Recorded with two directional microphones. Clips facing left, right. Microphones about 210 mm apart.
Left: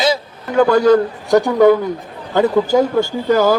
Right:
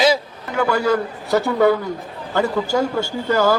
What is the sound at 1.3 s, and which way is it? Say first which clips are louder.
Speech: left 5 dB; 15° left (ahead or behind).